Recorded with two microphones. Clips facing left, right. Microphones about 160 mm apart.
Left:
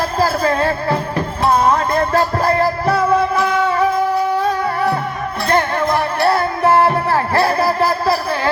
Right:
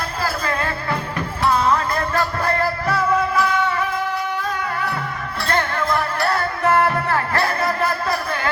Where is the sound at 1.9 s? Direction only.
30° left (ahead or behind).